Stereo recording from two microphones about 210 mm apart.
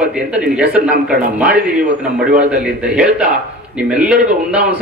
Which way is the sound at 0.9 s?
45° right (ahead or behind).